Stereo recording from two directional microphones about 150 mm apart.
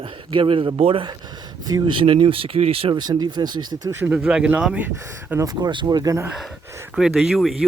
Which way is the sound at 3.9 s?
15° right (ahead or behind).